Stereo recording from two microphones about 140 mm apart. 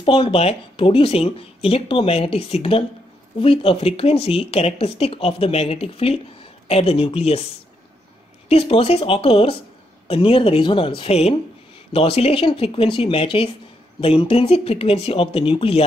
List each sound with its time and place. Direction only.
0.0 s speech: 40° left (ahead or behind)
8.5 s speech: 40° left (ahead or behind)